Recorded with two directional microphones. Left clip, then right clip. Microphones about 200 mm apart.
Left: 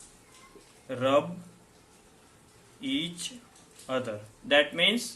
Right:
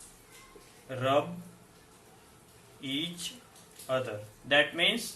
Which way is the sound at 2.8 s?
45° left (ahead or behind).